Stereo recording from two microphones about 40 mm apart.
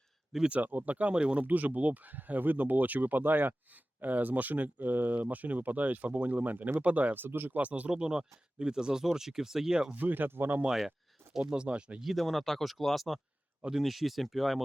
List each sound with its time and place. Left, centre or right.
0.4 s speech: right
1.1 s speech: right
1.4 s speech: right
7.1 s speech: right
7.5 s speech: right
7.9 s speech: centre
9.9 s speech: right
11.3 s speech: right
11.7 s speech: right
12.0 s speech: centre